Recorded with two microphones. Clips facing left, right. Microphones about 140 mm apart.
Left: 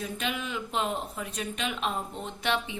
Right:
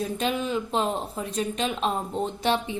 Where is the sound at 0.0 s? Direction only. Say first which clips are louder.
Right 6 dB; 35° right (ahead or behind).